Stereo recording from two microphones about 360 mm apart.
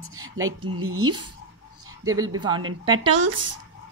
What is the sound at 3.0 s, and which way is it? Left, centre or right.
Speech, right.